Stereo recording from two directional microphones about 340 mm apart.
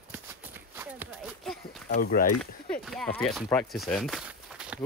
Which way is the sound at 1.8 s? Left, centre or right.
Left.